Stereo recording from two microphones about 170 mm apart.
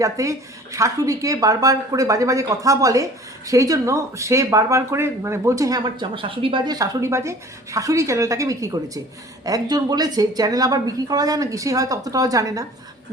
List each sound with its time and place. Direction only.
0.0 s speech: 20° right (ahead or behind)